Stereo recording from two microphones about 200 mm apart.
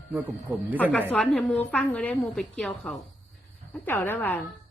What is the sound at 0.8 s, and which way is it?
A man's voice, 5° left (ahead or behind).